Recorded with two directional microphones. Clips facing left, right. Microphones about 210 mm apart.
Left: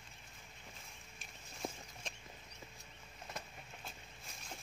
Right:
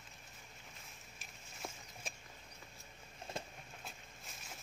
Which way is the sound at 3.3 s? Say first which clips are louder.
Right 4 dB; 25° right (ahead or behind).